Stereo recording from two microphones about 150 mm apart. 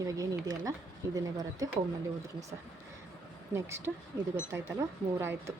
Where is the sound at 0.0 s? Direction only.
25° right (ahead or behind).